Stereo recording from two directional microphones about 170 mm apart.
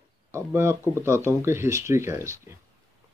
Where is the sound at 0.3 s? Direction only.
15° right (ahead or behind).